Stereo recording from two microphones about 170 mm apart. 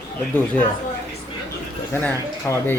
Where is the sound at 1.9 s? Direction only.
15° left (ahead or behind).